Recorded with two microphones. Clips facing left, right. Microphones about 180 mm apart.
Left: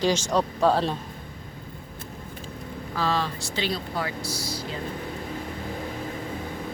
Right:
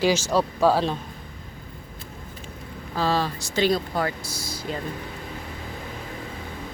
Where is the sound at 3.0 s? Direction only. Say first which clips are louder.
Right 3 dB; 35° right (ahead or behind).